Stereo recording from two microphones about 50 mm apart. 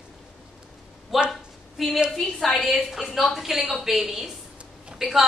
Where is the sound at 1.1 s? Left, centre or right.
Centre.